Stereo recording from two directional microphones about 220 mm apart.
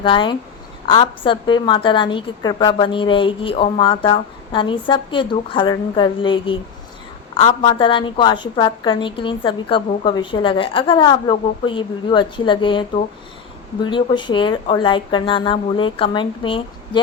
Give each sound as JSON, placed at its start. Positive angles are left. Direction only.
{"t": 0.0, "sound": "a woman's voice", "side_deg": 20}